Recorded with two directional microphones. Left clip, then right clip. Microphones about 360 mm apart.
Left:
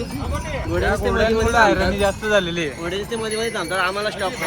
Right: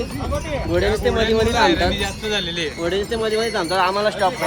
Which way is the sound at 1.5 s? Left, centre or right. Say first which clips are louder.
Left 1 dB; centre.